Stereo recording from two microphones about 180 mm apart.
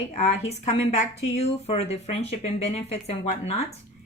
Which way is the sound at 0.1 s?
40° left (ahead or behind).